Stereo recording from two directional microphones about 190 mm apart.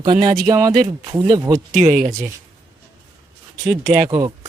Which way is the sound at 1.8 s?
45° right (ahead or behind).